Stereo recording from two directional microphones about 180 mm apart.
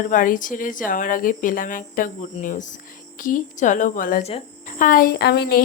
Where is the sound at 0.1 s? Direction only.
50° left (ahead or behind).